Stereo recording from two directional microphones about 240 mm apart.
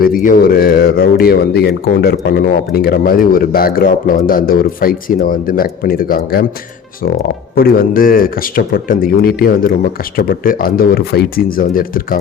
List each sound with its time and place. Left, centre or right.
0.0 s a man's voice: left